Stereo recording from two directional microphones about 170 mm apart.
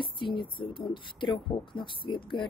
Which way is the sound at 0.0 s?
30° left (ahead or behind).